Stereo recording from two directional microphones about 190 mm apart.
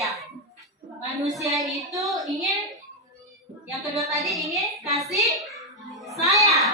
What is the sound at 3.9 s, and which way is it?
Speech, centre (ahead or behind).